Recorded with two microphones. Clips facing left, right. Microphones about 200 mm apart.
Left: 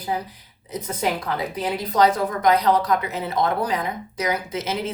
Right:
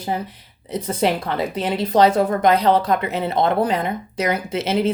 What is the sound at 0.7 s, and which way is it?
Speech, 30° right (ahead or behind).